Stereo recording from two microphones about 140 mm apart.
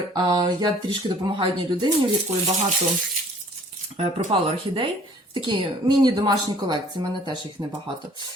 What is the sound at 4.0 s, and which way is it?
Speech, 40° right (ahead or behind).